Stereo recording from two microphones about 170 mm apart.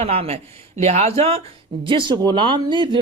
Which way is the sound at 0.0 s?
35° right (ahead or behind).